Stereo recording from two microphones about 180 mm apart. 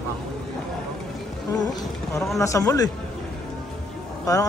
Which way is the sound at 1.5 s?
20° left (ahead or behind).